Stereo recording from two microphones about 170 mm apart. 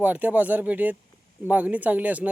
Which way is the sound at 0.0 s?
10° right (ahead or behind).